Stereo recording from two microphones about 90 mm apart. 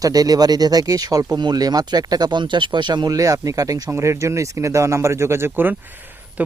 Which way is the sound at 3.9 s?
30° right (ahead or behind).